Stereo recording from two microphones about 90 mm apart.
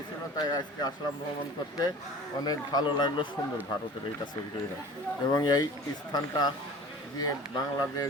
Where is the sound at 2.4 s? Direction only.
50° left (ahead or behind).